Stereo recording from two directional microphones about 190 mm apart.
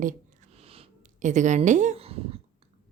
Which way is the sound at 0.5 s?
30° right (ahead or behind).